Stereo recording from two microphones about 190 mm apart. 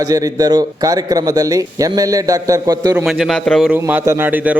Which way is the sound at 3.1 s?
Centre (ahead or behind).